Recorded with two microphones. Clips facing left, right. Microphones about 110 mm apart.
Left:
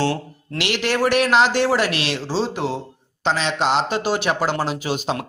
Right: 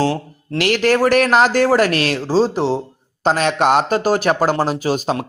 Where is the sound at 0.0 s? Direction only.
40° right (ahead or behind).